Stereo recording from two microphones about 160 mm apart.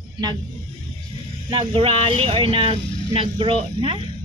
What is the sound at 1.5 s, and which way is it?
Speech, 35° right (ahead or behind).